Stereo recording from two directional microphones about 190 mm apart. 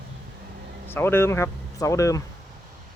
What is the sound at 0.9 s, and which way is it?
Speech, 10° left (ahead or behind).